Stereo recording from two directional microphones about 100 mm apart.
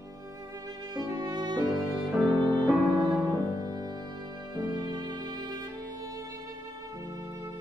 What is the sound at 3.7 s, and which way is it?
Music, 40° right (ahead or behind).